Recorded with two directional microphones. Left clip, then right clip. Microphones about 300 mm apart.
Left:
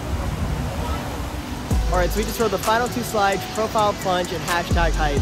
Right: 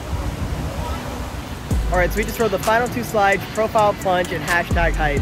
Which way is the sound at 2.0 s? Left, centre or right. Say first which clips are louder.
Right 3 dB; centre.